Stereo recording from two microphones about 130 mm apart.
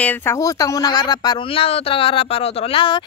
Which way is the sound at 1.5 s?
50° left (ahead or behind).